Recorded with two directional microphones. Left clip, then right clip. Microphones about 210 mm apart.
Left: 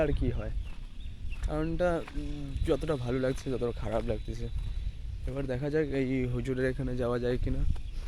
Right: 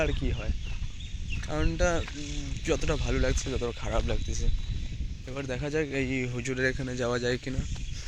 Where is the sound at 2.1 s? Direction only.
35° left (ahead or behind).